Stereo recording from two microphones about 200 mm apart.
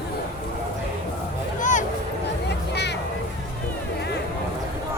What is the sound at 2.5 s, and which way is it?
Music, 55° left (ahead or behind).